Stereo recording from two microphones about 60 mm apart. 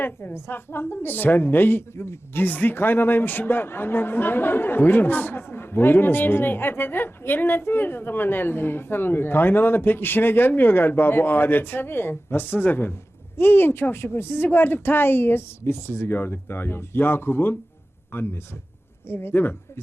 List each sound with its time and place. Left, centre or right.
0.0 s a woman's voice: left